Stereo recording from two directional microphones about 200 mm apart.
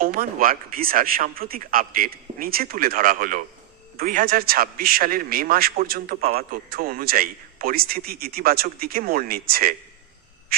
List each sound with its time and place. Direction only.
0.0 s a man's voice: 45° right (ahead or behind)
6.2 s speech: 35° right (ahead or behind)
6.7 s a man's voice: 45° right (ahead or behind)